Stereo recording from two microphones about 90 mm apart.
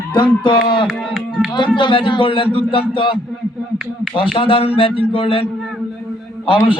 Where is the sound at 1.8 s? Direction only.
65° left (ahead or behind); by 2.6 s 85° left.